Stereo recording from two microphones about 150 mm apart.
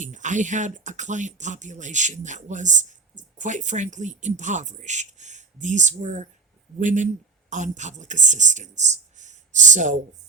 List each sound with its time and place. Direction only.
0.0 s speech: 55° right (ahead or behind)